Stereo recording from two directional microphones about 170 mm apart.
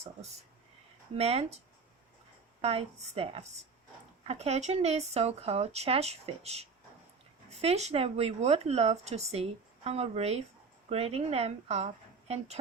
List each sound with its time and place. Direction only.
0.0 s speech: 40° right (ahead or behind)
2.6 s speech: 35° right (ahead or behind)